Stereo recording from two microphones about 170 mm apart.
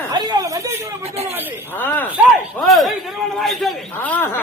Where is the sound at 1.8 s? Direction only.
10° left (ahead or behind).